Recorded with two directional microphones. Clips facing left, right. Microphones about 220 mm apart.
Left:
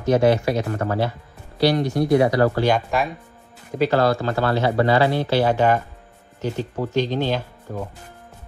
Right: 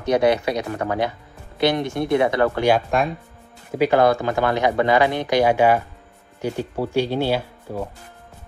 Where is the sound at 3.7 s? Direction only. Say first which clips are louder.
Right 2 dB; 15° right (ahead or behind).